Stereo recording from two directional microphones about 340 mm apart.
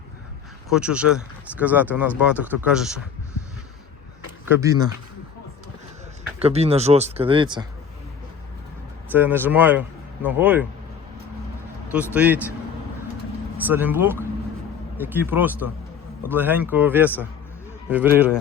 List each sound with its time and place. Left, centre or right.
0.7 s speech: centre
4.4 s speech: centre
6.4 s speech: centre
9.1 s speech: centre
11.9 s speech: centre
13.7 s speech: centre